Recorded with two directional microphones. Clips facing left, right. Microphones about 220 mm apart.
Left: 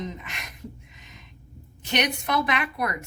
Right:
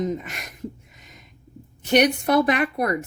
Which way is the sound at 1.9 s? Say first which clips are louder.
Right 8 dB; 45° right (ahead or behind).